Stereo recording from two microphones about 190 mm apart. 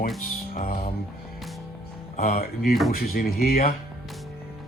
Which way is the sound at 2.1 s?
50° left (ahead or behind).